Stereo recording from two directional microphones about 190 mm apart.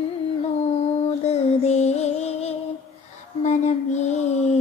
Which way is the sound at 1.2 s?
35° left (ahead or behind).